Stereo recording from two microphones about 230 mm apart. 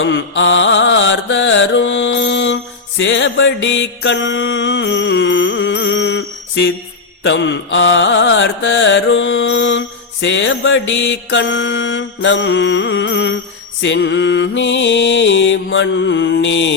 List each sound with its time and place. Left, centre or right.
0.0 s music: left
3.0 s mantra: left
7.3 s carnatic music: left